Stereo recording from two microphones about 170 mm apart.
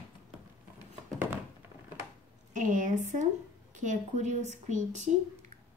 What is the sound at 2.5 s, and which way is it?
A woman's voice, 50° right (ahead or behind).